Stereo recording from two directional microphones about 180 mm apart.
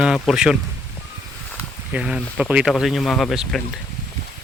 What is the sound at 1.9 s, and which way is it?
Speech, 5° right (ahead or behind).